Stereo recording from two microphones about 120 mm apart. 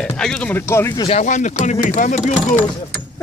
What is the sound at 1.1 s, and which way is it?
Speech, 90° left.